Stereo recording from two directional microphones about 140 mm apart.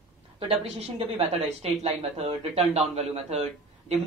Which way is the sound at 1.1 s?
45° right (ahead or behind).